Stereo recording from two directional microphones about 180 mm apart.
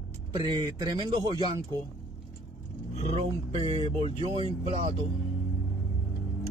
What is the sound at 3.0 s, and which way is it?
Speech, 35° right (ahead or behind).